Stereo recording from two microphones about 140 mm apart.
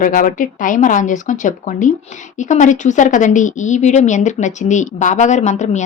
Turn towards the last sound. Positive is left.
turn(degrees=55)  # may be behind; listen again after turning